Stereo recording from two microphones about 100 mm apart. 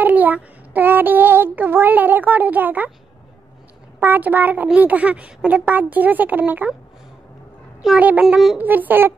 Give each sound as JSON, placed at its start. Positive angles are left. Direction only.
{"t": 0.0, "sound": "child singing", "side_deg": -15}
{"t": 4.0, "sound": "child singing", "side_deg": -20}
{"t": 8.0, "sound": "child singing", "side_deg": -15}
{"t": 8.5, "sound": "a child's voice", "side_deg": -20}